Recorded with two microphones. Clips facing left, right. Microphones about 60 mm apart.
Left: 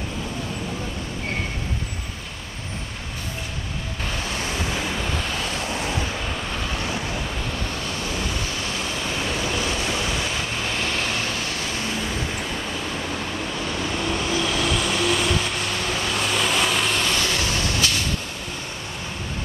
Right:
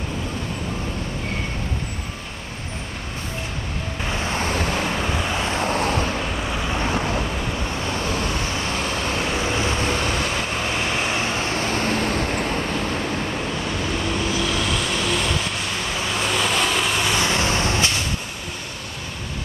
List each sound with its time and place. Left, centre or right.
5.3 s vehicle: right
5.7 s vehicle: right
10.7 s vehicle: right
14.7 s vehicle: centre
17.2 s vehicle: right